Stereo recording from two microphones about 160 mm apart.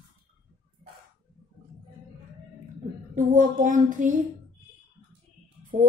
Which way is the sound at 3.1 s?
55° right (ahead or behind).